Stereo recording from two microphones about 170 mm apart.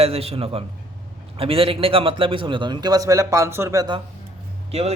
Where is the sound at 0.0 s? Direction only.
35° right (ahead or behind).